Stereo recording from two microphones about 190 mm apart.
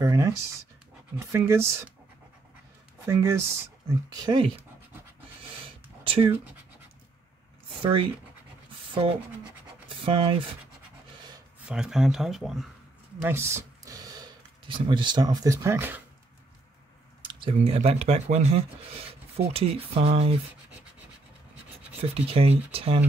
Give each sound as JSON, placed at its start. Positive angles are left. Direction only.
{"t": 0.0, "sound": "speech", "side_deg": -20}
{"t": 3.1, "sound": "speech", "side_deg": -15}
{"t": 6.0, "sound": "speech", "side_deg": -30}
{"t": 7.8, "sound": "speech", "side_deg": -25}
{"t": 11.6, "sound": "speech", "side_deg": -5}
{"t": 13.2, "sound": "speech", "side_deg": -15}
{"t": 17.2, "sound": "speech", "side_deg": -25}
{"t": 22.1, "sound": "speech", "side_deg": -30}